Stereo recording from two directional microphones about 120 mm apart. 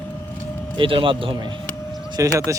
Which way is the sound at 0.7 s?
45° right (ahead or behind).